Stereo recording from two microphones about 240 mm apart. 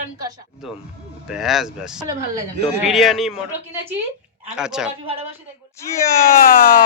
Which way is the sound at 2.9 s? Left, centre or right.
Centre.